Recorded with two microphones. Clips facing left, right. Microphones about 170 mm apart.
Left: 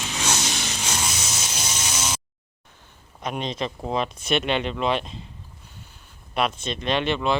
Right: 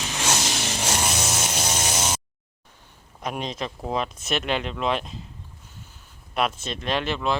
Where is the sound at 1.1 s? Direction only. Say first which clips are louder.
Right 5 dB; 55° right (ahead or behind).